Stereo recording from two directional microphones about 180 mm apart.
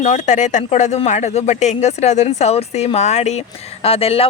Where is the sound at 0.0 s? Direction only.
40° left (ahead or behind).